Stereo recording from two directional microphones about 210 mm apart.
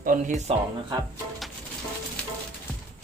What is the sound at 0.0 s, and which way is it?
Speech, 35° right (ahead or behind).